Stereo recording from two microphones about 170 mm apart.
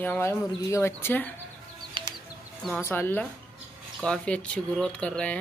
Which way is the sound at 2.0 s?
30° right (ahead or behind).